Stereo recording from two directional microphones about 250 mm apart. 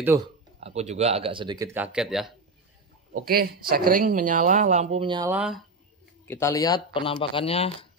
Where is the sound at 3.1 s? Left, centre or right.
Right.